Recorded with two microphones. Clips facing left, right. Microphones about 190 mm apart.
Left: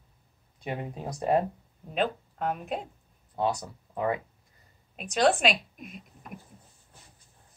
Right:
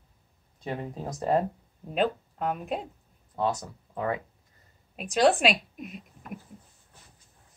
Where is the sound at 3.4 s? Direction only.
10° left (ahead or behind).